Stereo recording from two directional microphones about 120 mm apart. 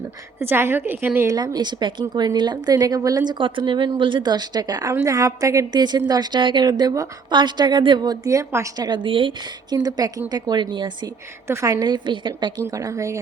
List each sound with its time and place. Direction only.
0.3 s a woman's voice: 20° right (ahead or behind)
1.5 s a woman's voice: 40° right (ahead or behind)
8.9 s a woman's voice: 45° right (ahead or behind)
11.4 s a woman's voice: 25° right (ahead or behind)
12.7 s a woman's voice: 25° right (ahead or behind)